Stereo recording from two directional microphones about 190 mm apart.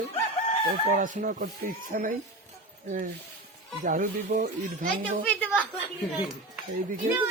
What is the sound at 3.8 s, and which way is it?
Speech, 45° right (ahead or behind).